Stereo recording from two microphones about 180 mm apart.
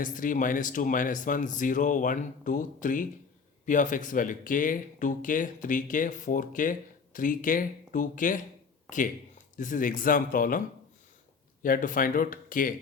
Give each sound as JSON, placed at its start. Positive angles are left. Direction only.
{"t": 0.0, "sound": "speech", "side_deg": 45}
{"t": 9.6, "sound": "speech", "side_deg": 45}
{"t": 11.6, "sound": "speech", "side_deg": 50}